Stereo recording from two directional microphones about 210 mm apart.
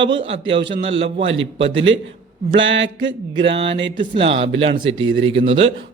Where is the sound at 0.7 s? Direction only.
30° right (ahead or behind).